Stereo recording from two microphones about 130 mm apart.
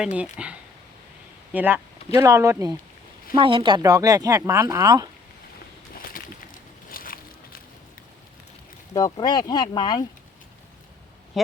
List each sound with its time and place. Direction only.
0.0 s speech: 10° right (ahead or behind)
1.5 s speech: 15° right (ahead or behind)
3.3 s speech: 40° right (ahead or behind)
6.1 s a sound: 90° left
8.9 s speech: 25° left (ahead or behind)